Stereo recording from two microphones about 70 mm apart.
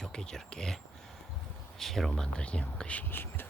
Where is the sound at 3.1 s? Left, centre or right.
Left.